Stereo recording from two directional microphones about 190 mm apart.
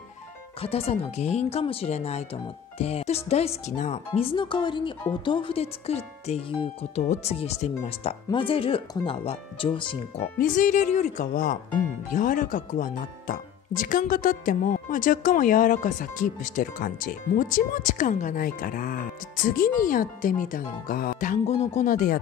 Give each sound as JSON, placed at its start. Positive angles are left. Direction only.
{"t": 0.6, "sound": "speech", "side_deg": 30}
{"t": 10.4, "sound": "speech", "side_deg": 40}